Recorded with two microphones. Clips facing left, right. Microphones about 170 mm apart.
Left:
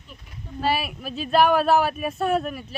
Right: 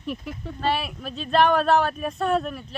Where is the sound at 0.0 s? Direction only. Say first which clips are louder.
Right 13 dB; 80° right.